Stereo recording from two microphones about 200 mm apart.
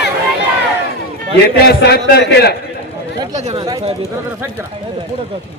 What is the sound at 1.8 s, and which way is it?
Speech, 55° left (ahead or behind).